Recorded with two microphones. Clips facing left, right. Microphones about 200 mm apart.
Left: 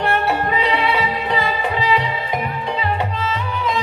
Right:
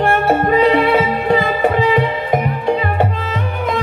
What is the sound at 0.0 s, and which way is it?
Music, 50° right (ahead or behind).